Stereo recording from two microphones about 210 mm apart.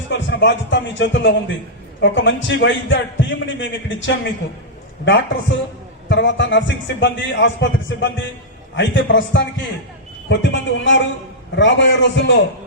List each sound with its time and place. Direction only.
0.1 s a man's voice: 60° left (ahead or behind)